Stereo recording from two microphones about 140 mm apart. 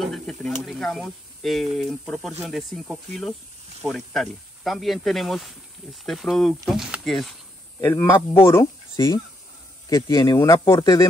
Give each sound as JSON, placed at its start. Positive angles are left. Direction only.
{"t": 0.0, "sound": "speech", "side_deg": 5}
{"t": 7.8, "sound": "speech", "side_deg": 15}
{"t": 8.9, "sound": "speech", "side_deg": 30}
{"t": 9.8, "sound": "a man's voice", "side_deg": 20}